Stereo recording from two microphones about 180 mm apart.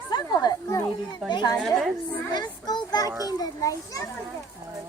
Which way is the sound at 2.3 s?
20° left (ahead or behind).